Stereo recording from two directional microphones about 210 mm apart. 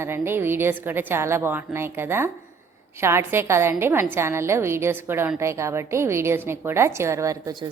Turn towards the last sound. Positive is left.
turn(degrees=-15)  # may be behind; listen again after turning